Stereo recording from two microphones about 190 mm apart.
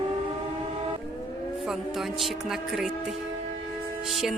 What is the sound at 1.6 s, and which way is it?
Speech, centre (ahead or behind).